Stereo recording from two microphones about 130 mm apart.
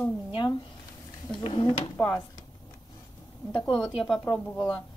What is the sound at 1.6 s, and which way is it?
Speech, 35° left (ahead or behind).